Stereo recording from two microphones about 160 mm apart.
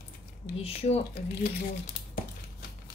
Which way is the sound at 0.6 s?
40° left (ahead or behind).